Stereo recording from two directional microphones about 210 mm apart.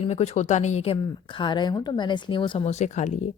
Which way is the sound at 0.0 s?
30° left (ahead or behind).